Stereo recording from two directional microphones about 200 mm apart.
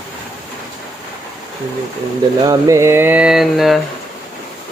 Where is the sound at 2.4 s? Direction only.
15° right (ahead or behind).